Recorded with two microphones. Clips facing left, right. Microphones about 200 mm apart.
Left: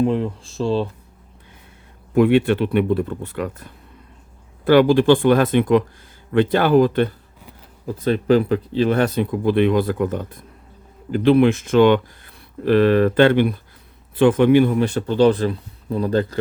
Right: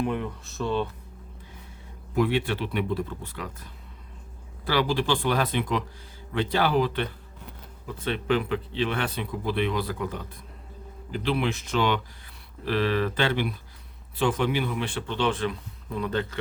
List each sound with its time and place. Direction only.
0.0 s speech: 30° left (ahead or behind)
2.1 s speech: 55° left (ahead or behind); by 16.4 s 35° left (ahead or behind)